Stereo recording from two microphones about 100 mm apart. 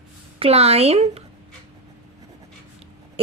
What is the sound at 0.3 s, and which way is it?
Speech, 85° right.